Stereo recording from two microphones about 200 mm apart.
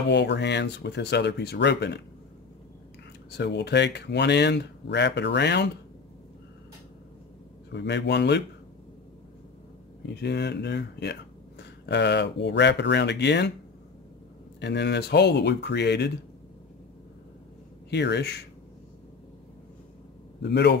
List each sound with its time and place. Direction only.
0.1 s speech: 60° left (ahead or behind)
3.3 s speech: 60° left (ahead or behind)
7.7 s speech: 60° left (ahead or behind)
10.0 s speech: 55° left (ahead or behind)
14.6 s speech: 60° left (ahead or behind)
17.8 s speech: 60° left (ahead or behind)
20.4 s speech: 60° left (ahead or behind)